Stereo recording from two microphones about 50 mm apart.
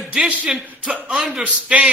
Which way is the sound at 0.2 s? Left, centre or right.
Right.